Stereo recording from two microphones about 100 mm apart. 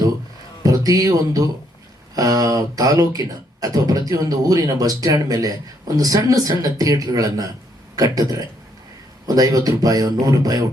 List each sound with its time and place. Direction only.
0.6 s speech: 35° right (ahead or behind)